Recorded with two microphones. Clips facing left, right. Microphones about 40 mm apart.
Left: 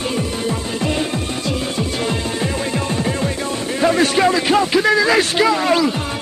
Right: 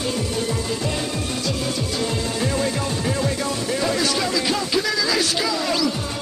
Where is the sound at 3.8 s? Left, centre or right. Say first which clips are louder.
Left 10 dB; left.